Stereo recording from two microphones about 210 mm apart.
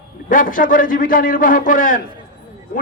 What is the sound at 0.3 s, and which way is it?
A man's voice, 40° left (ahead or behind).